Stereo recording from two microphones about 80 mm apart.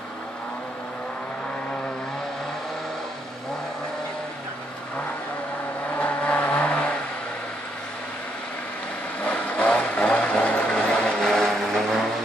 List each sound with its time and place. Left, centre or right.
5.9 s vehicle: centre
9.2 s vehicle: centre